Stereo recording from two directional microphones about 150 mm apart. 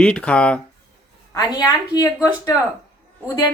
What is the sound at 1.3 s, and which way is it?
Speech, 25° left (ahead or behind).